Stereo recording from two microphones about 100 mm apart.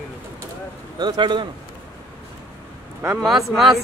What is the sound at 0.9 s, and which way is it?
Speech, 45° right (ahead or behind).